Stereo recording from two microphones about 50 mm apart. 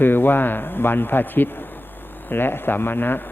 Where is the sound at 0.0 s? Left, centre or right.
Left.